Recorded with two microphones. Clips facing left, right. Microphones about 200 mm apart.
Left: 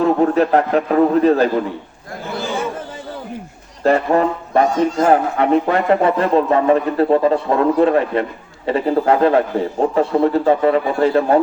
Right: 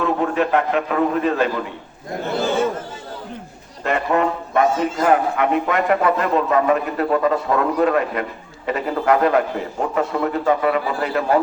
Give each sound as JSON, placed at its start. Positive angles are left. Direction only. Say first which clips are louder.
{"t": 0.0, "sound": "a man's voice", "louder": "left 5 dB", "side_deg": 35}
{"t": 3.8, "sound": "music", "louder": "left 5 dB", "side_deg": 35}
{"t": 4.6, "sound": "speech", "louder": "left 2 dB", "side_deg": -5}
{"t": 5.0, "sound": "a man's voice", "louder": "left 1 dB", "side_deg": 35}